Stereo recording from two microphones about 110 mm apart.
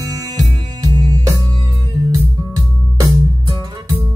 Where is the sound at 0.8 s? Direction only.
35° right (ahead or behind).